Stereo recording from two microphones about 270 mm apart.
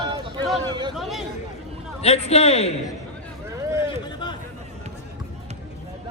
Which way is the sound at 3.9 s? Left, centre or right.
Centre.